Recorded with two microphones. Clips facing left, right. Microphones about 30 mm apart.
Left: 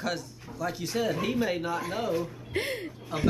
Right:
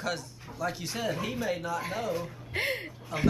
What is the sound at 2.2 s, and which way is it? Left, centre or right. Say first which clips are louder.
Speech: left 1 dB; centre.